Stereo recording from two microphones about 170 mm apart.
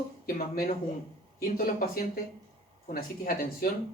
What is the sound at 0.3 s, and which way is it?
Speech, 60° left (ahead or behind).